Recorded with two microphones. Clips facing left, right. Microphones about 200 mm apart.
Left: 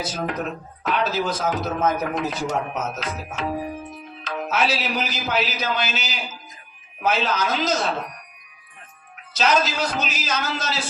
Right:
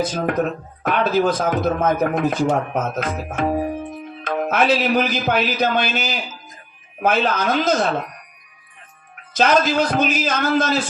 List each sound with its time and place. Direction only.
0.0 s speech: 55° right (ahead or behind)
9.3 s speech: 55° right (ahead or behind)